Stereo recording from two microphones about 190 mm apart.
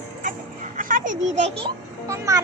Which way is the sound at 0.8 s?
45° right (ahead or behind).